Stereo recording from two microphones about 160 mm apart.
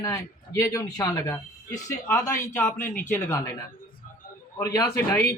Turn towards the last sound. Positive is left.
turn(degrees=15)  # may be behind; listen again after turning